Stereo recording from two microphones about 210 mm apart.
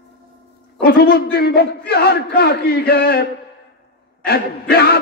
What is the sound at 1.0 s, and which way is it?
Speech, 50° left (ahead or behind).